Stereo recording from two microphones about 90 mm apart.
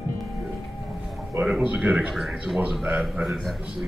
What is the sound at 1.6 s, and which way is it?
Speech, 15° right (ahead or behind).